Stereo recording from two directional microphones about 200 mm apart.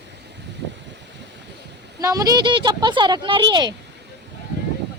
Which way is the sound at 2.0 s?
15° right (ahead or behind).